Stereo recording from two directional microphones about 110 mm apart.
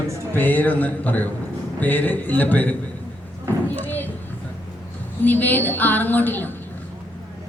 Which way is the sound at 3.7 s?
15° left (ahead or behind).